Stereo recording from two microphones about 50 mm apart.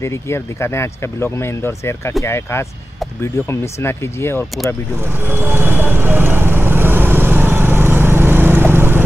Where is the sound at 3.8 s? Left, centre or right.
Left.